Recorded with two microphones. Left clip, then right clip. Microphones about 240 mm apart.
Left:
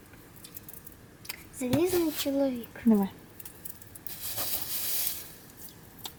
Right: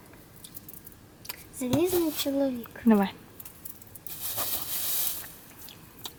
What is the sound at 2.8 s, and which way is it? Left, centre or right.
Speech, centre.